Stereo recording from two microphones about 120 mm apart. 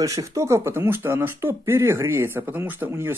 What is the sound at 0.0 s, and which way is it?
Speech, 30° right (ahead or behind).